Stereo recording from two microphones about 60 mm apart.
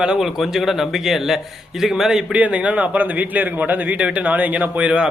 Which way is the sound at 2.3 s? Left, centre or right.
Right.